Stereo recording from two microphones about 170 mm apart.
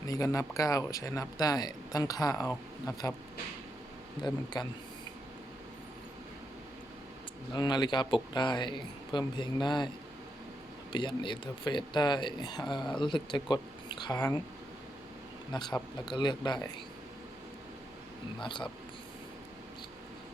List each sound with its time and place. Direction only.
0.1 s speech: 20° left (ahead or behind)
4.2 s speech: 25° left (ahead or behind)
7.5 s speech: 25° left (ahead or behind)
10.9 s speech: 30° left (ahead or behind)
15.5 s speech: 25° left (ahead or behind)
18.3 s speech: 30° left (ahead or behind)